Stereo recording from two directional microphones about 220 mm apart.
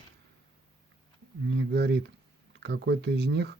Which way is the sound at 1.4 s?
50° right (ahead or behind).